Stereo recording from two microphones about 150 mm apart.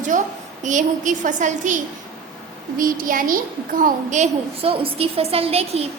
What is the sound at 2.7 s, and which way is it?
A woman's voice, 70° right (ahead or behind).